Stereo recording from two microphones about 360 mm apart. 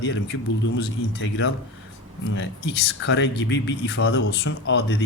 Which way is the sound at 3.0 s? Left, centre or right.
Left.